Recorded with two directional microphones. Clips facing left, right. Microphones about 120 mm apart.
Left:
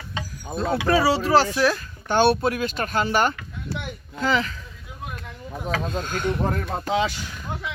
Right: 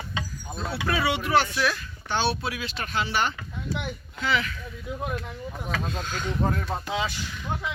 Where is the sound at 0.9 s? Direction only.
35° left (ahead or behind).